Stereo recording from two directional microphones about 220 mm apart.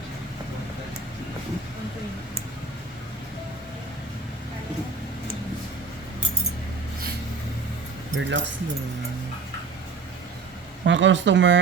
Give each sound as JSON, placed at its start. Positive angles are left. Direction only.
{"t": 8.1, "sound": "speech", "side_deg": -55}
{"t": 10.8, "sound": "speech", "side_deg": -55}